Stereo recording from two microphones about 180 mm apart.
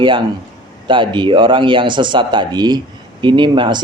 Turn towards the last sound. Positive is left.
turn(degrees=-25)  # may be behind; listen again after turning